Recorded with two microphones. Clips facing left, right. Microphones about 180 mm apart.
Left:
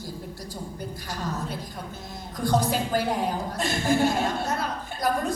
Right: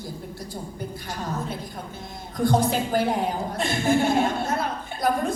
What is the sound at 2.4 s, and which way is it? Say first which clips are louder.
Speech: right 3 dB; 50° right (ahead or behind).